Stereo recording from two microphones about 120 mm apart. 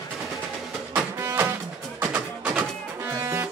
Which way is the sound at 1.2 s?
25° right (ahead or behind).